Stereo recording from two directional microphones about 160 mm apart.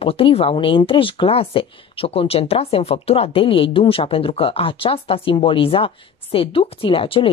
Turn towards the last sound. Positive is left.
turn(degrees=35)  # may be behind; listen again after turning